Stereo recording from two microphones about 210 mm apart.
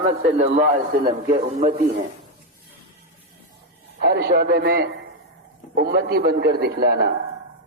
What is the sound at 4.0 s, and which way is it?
A man's voice, 50° right (ahead or behind).